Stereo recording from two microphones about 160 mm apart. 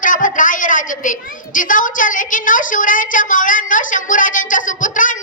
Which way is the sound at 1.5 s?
55° left (ahead or behind).